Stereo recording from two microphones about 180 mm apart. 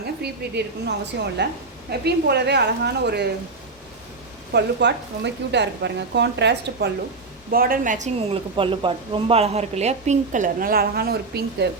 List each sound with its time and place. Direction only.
0.0 s speech: 65° right (ahead or behind)
4.5 s speech: 70° right (ahead or behind)
7.5 s a woman's voice: 55° right (ahead or behind)
8.5 s a woman's voice: 30° right (ahead or behind); by 11.7 s 65° right (ahead or behind)